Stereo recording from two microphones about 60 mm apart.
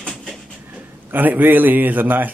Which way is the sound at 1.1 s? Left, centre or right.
Right.